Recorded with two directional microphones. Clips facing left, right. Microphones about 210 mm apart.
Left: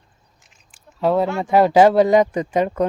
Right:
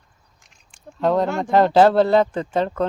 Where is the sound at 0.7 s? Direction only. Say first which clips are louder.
Left 1 dB; 5° left (ahead or behind).